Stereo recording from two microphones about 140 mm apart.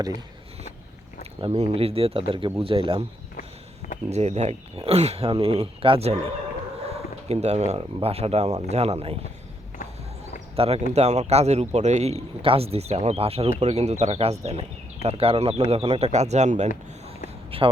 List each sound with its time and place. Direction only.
1.2 s speech: 45° right (ahead or behind)
4.1 s a man's voice: 50° right (ahead or behind)
6.9 s a sound: 50° right (ahead or behind)
7.9 s a man's voice: 45° right (ahead or behind)
10.5 s a man's voice: 45° right (ahead or behind)
17.5 s speech: 40° right (ahead or behind)